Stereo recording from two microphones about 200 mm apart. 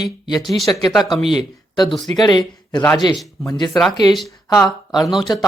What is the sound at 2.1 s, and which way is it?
Speech, 20° left (ahead or behind).